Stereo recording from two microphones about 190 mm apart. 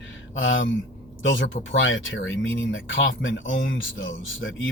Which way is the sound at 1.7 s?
90° left.